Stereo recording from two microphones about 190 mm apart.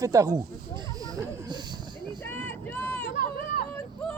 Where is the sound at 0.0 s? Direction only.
15° right (ahead or behind).